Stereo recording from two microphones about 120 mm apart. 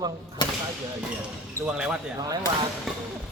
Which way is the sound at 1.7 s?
10° right (ahead or behind).